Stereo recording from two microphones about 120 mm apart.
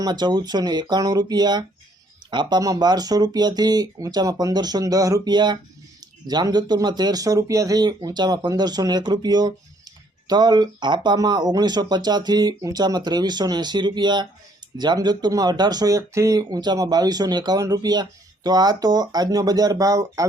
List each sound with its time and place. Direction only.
0.0 s speech: 35° right (ahead or behind)